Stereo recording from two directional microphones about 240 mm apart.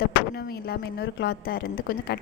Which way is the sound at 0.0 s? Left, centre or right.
Left.